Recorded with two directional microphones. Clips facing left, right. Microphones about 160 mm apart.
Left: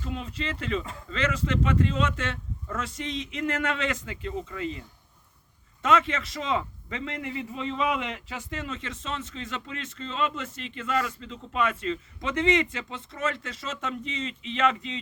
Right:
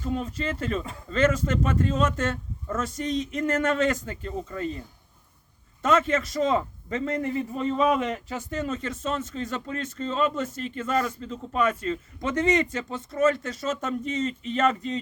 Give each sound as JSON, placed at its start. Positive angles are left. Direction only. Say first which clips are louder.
{"t": 0.0, "sound": "a man's voice", "louder": "right 5 dB", "side_deg": -45}
{"t": 5.8, "sound": "a man's voice", "louder": "right 2 dB", "side_deg": -45}